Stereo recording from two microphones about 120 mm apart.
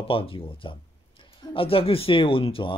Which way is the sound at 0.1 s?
50° left (ahead or behind).